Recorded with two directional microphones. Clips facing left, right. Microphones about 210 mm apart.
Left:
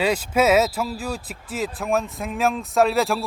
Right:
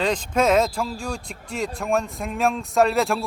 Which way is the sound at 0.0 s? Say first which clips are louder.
Left 1 dB; 10° left (ahead or behind).